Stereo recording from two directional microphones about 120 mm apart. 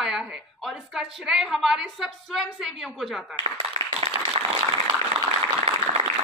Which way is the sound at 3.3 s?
50° right (ahead or behind).